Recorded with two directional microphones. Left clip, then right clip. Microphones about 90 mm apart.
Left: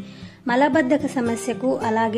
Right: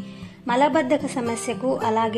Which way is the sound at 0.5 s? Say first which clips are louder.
Left 1 dB; 40° left (ahead or behind).